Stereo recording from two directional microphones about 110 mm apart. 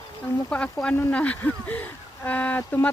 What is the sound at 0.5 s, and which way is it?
Speech, 10° left (ahead or behind).